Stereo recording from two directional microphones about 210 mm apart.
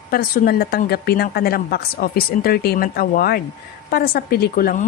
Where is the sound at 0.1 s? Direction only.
45° left (ahead or behind).